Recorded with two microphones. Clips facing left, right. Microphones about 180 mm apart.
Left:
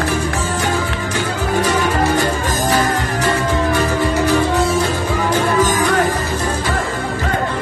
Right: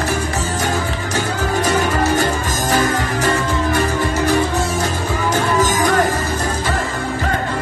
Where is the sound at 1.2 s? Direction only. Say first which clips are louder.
Left 1 dB; 45° right (ahead or behind).